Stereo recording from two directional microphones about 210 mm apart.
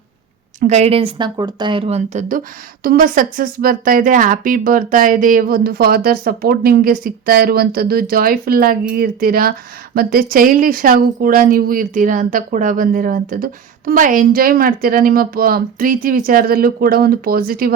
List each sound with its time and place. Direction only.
0.7 s speech: 30° right (ahead or behind)
2.8 s speech: 45° right (ahead or behind)